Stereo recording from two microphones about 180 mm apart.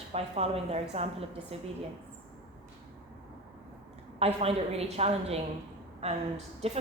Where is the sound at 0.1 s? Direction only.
35° right (ahead or behind).